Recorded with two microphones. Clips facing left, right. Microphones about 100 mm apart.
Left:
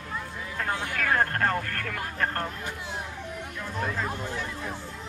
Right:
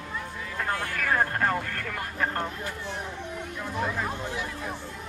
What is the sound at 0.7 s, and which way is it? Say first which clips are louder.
Vehicle: right 1 dB; 15° left (ahead or behind).